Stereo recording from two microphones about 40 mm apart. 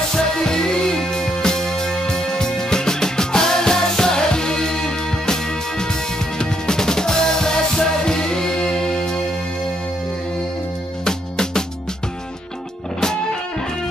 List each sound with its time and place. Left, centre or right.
0.1 s music: centre
11.1 s music: centre